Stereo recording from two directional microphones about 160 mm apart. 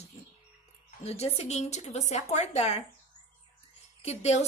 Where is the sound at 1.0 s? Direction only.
40° left (ahead or behind).